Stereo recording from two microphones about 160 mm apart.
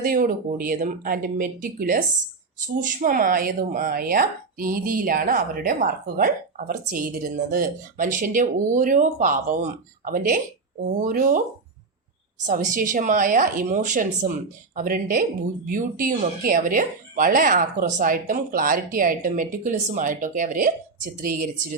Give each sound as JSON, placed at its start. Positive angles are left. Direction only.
{"t": 0.0, "sound": "speech", "side_deg": -60}
{"t": 12.5, "sound": "speech", "side_deg": -55}